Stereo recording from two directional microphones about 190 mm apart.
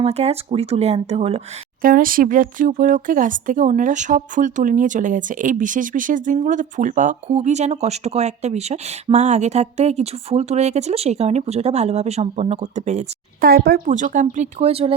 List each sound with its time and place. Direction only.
0.0 s speech: 35° right (ahead or behind)
1.8 s speech: 45° right (ahead or behind)
13.5 s speech: 55° right (ahead or behind); by 14.9 s 30° right (ahead or behind)